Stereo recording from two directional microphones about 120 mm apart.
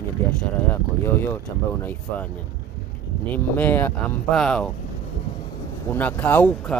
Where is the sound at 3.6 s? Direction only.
15° left (ahead or behind).